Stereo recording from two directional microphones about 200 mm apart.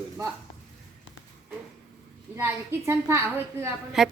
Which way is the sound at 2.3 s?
10° right (ahead or behind).